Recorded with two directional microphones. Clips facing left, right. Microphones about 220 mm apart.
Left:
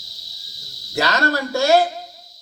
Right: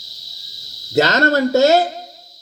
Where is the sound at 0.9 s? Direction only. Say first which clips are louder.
Right 6 dB; 20° right (ahead or behind).